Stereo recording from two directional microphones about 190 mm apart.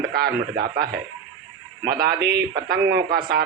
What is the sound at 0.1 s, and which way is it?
Speech, 55° right (ahead or behind).